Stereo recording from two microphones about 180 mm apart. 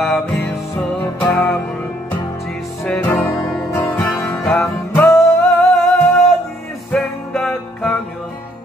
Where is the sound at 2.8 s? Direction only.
5° left (ahead or behind).